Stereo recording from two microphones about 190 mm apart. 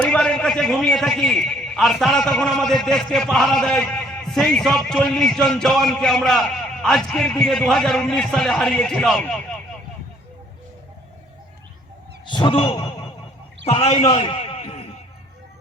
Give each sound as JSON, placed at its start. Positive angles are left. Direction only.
{"t": 0.0, "sound": "a man's voice", "side_deg": 5}
{"t": 12.3, "sound": "a man's voice", "side_deg": 25}